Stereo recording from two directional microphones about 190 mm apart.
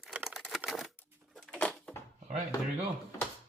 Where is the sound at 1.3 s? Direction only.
5° left (ahead or behind).